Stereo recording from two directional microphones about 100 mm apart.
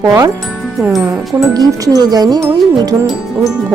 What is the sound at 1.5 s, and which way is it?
Music, 40° right (ahead or behind).